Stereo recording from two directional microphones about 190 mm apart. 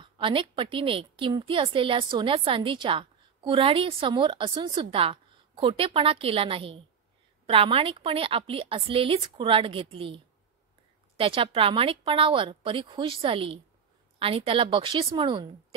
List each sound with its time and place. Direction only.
0.0 s a woman's voice: 25° right (ahead or behind)